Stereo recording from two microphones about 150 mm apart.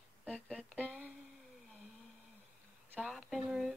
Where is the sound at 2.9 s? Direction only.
Centre (ahead or behind).